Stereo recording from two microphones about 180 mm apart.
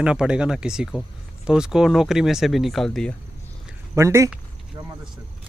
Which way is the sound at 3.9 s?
15° right (ahead or behind).